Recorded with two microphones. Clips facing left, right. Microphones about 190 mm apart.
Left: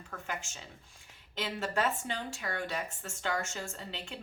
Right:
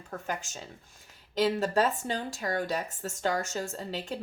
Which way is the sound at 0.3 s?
40° right (ahead or behind).